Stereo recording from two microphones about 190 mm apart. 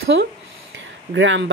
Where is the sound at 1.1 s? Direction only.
85° right.